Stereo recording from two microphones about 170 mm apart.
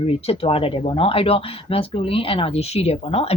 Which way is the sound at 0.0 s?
35° left (ahead or behind).